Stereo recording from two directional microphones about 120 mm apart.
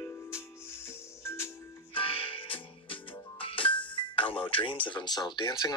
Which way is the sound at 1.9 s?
45° left (ahead or behind).